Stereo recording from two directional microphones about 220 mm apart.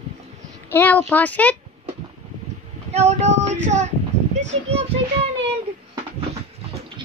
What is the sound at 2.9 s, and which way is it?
Child singing, 30° right (ahead or behind).